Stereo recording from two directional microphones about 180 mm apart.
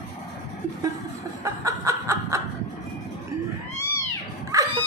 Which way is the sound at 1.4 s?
15° right (ahead or behind).